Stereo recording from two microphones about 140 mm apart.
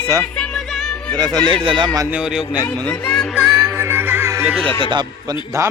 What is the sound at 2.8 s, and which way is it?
Speech, 5° left (ahead or behind).